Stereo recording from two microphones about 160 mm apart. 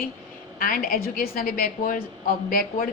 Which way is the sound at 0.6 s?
65° left (ahead or behind).